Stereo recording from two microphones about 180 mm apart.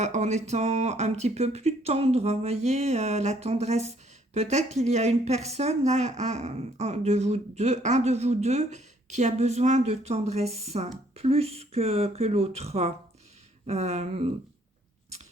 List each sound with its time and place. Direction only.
0.0 s speech: 40° right (ahead or behind)